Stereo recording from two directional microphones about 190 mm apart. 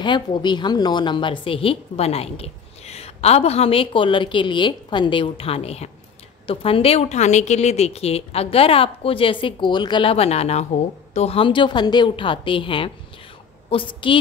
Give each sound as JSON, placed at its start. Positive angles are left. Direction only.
{"t": 0.0, "sound": "a woman's voice", "side_deg": 25}